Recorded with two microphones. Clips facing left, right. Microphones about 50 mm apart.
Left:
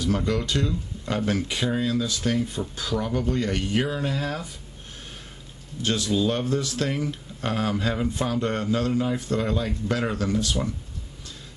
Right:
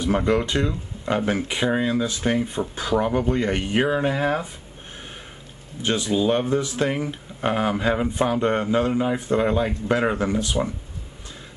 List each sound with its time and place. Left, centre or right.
0.0 s speech: right
5.8 s speech: right